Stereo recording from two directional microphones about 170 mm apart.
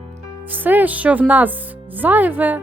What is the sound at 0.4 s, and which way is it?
Speech, 10° right (ahead or behind).